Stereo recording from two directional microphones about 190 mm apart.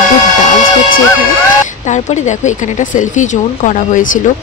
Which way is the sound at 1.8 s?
40° left (ahead or behind).